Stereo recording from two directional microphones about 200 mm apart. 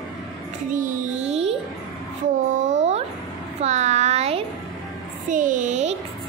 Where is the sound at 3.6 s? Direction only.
35° right (ahead or behind).